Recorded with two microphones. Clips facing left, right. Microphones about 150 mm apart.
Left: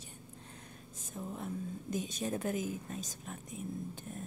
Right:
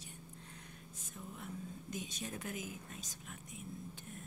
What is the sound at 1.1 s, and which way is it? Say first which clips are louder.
A woman's voice: left 7 dB; 40° left (ahead or behind).